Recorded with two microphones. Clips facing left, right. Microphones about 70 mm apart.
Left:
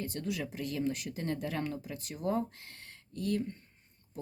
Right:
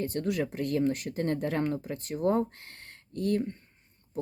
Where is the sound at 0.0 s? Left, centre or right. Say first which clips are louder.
Right 7 dB; right.